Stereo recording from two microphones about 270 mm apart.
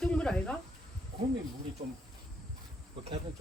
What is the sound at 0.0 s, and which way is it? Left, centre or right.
Insect, centre.